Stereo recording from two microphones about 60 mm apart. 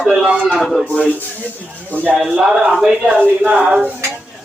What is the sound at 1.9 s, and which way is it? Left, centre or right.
Speech, left.